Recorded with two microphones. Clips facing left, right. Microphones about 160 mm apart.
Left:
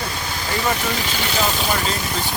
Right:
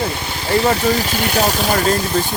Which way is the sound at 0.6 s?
30° right (ahead or behind).